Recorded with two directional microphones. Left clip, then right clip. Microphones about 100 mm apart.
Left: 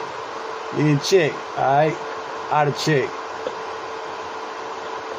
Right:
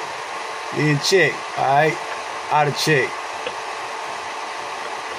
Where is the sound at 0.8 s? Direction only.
25° left (ahead or behind).